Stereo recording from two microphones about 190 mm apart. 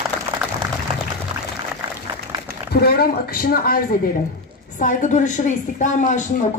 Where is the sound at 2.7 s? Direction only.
55° left (ahead or behind).